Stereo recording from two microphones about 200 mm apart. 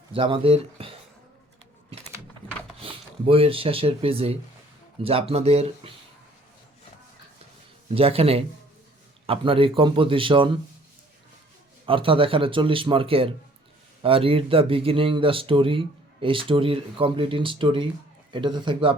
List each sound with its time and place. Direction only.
0.1 s speech: 25° right (ahead or behind)
2.7 s speech: 25° right (ahead or behind)
7.9 s speech: 30° right (ahead or behind)
11.9 s speech: 25° right (ahead or behind)